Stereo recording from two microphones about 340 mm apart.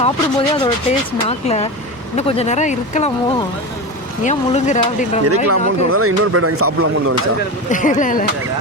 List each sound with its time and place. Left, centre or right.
0.0 s speech: centre
5.2 s speech: right
7.7 s speech: left